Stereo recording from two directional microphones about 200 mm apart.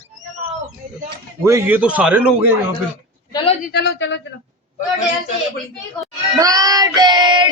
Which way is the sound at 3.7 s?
60° left (ahead or behind).